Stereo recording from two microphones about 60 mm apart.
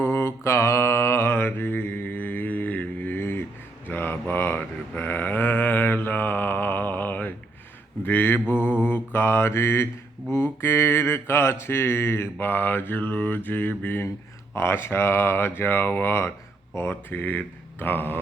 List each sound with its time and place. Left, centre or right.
0.0 s mantra: left
3.8 s a sound: left
8.0 s mantra: left
8.6 s mantra: right
8.9 s mantra: left
14.5 s speech: left